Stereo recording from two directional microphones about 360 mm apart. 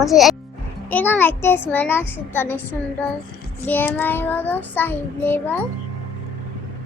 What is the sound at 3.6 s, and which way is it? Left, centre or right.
Child singing, centre.